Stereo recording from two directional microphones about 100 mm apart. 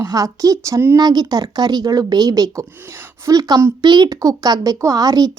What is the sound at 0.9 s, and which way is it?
Speech, 45° right (ahead or behind).